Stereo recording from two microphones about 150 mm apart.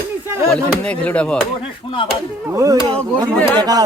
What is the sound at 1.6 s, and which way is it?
Speech, 35° left (ahead or behind).